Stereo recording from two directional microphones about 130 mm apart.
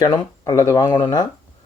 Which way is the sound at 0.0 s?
35° left (ahead or behind).